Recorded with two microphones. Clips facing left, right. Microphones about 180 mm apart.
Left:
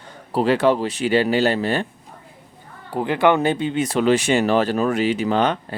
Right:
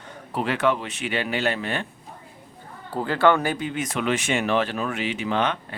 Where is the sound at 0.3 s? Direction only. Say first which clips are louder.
Left 6 dB; 35° left (ahead or behind).